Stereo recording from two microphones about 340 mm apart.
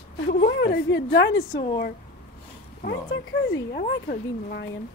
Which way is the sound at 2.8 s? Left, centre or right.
Left.